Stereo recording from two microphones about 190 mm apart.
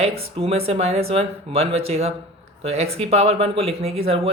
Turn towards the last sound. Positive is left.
turn(degrees=-30)  # may be behind; listen again after turning